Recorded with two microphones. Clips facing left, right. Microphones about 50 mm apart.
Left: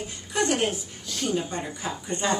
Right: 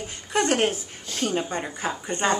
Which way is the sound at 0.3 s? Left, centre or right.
Right.